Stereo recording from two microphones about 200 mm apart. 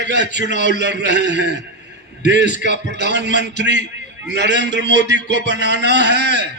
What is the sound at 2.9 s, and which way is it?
A man's voice, 60° right (ahead or behind).